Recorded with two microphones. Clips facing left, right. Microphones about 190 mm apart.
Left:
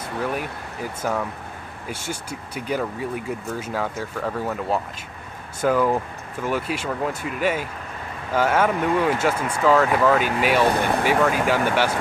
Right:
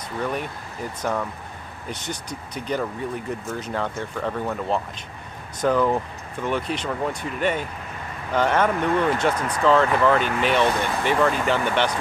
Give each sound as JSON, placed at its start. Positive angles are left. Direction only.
{"t": 0.2, "sound": "speech", "side_deg": 5}